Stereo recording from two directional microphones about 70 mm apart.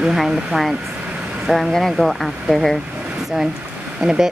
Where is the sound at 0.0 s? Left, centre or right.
Centre.